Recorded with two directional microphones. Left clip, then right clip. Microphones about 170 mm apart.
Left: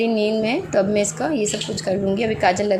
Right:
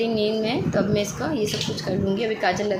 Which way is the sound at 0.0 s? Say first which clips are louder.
Left 3 dB; 25° left (ahead or behind).